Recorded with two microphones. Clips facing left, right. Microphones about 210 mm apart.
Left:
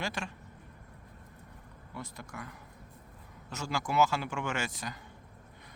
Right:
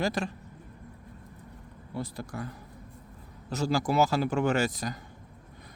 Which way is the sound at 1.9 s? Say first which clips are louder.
Right 8 dB; 35° right (ahead or behind).